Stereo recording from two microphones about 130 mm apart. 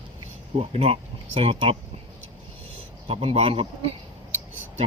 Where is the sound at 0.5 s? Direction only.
50° right (ahead or behind).